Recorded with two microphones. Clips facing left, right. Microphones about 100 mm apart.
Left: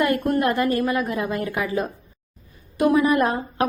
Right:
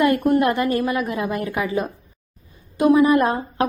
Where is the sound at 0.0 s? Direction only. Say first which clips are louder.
Right 3 dB; 20° right (ahead or behind).